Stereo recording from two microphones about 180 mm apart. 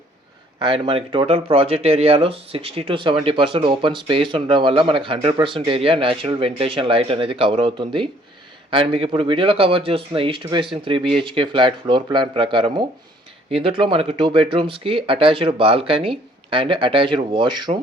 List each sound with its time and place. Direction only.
0.6 s a man's voice: 30° right (ahead or behind)